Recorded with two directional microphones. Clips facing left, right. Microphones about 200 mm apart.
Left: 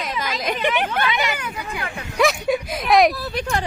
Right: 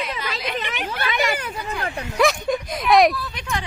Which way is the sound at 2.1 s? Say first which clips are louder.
Left 1 dB; centre (ahead or behind).